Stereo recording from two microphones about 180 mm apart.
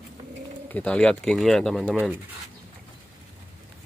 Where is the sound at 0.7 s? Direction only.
5° left (ahead or behind).